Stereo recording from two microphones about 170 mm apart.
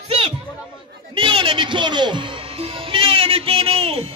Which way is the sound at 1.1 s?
30° right (ahead or behind).